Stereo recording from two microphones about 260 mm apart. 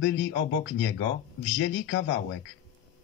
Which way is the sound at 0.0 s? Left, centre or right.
Left.